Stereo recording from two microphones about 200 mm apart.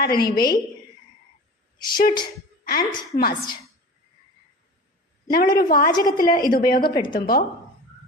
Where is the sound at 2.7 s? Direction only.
50° left (ahead or behind).